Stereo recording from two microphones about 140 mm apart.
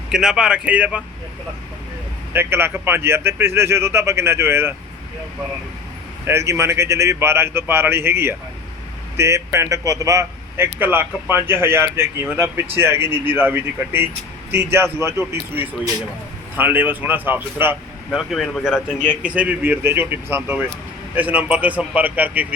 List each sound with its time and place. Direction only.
0.1 s speech: 5° right (ahead or behind)
2.3 s speech: 15° right (ahead or behind)
6.2 s a man's voice: 20° right (ahead or behind)
18.1 s speech: centre (ahead or behind)
18.9 s a man's voice: 15° left (ahead or behind)
19.2 s speech: 10° right (ahead or behind)